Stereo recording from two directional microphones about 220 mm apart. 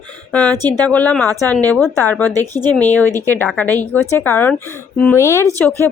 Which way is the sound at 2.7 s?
10° left (ahead or behind).